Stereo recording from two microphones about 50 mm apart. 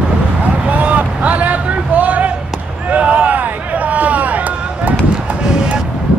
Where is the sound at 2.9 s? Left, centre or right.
Right.